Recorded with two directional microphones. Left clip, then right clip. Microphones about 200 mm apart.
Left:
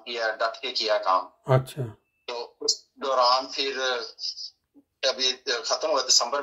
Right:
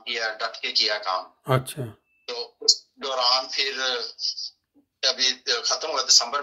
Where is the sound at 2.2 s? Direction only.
50° left (ahead or behind).